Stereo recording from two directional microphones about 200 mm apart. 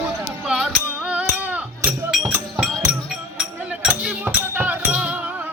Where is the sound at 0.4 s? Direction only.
Centre (ahead or behind).